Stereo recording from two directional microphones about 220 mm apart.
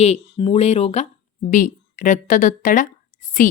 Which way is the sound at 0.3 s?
25° left (ahead or behind).